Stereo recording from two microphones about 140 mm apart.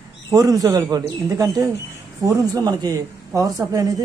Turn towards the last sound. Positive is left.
turn(degrees=-25)  # may be behind; listen again after turning